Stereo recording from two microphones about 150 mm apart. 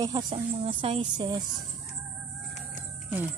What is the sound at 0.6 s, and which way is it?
Speech, 40° right (ahead or behind).